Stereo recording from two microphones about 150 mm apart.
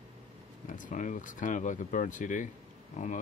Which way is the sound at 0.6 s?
60° left (ahead or behind).